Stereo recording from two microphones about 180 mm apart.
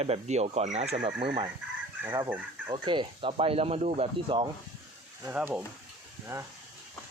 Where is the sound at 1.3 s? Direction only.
25° right (ahead or behind).